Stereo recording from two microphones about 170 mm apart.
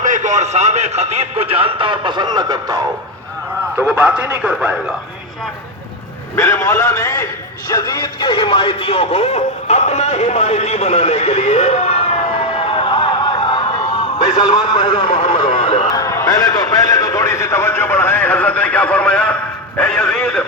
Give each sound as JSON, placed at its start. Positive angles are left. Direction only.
{"t": 0.0, "sound": "speech", "side_deg": -45}
{"t": 3.8, "sound": "a man's voice", "side_deg": -10}
{"t": 6.3, "sound": "a man's voice", "side_deg": 20}
{"t": 15.4, "sound": "radio", "side_deg": 35}
{"t": 15.9, "sound": "a man's voice", "side_deg": 20}